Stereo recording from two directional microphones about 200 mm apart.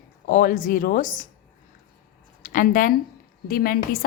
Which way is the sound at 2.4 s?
40° left (ahead or behind).